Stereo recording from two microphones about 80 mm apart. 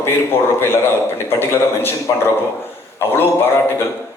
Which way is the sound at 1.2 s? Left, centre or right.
Left.